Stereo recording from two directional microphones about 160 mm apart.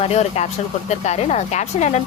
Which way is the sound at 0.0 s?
40° left (ahead or behind).